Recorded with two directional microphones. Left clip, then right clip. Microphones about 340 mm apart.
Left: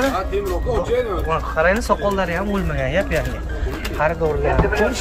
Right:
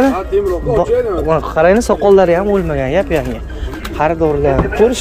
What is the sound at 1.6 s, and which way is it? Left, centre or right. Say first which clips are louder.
Speech: right 6 dB; right.